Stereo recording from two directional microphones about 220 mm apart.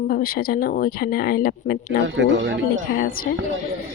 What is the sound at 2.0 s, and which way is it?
Speech, 55° right (ahead or behind).